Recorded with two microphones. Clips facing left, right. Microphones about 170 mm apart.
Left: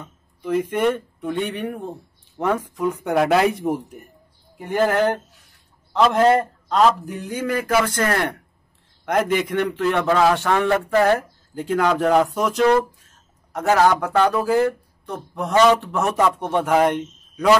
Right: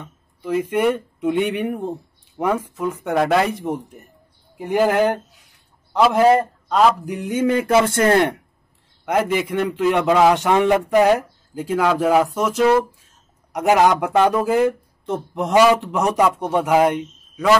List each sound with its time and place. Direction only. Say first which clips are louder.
0.0 s speech: even; 5° right (ahead or behind)
1.2 s speech: right 5 dB; 20° right (ahead or behind); by 4.0 s centre (ahead or behind)
4.6 s a man's voice: right 2 dB; 10° right (ahead or behind)
9.0 s a man's voice: even; 5° right (ahead or behind)